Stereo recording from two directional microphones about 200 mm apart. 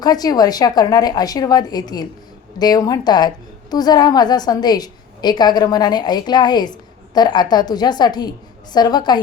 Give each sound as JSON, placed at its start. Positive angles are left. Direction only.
{"t": 0.0, "sound": "a woman's voice", "side_deg": 20}